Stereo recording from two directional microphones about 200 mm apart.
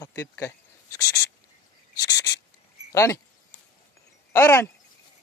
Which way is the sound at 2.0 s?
20° left (ahead or behind).